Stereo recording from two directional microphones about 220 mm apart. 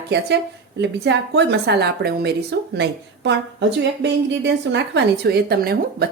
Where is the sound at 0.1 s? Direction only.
50° right (ahead or behind).